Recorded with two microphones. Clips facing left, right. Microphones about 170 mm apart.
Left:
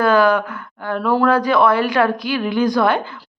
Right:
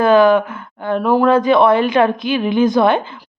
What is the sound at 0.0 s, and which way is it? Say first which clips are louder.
A woman's voice: right 4 dB; 20° right (ahead or behind).